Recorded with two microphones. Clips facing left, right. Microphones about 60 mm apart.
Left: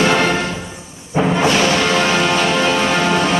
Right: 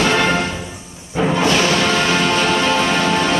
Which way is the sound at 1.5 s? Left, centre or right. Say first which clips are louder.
Left 1 dB; centre.